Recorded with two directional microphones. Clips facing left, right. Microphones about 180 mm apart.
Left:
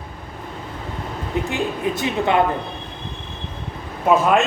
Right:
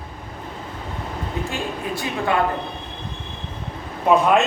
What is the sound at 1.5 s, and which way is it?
Speech, 20° left (ahead or behind).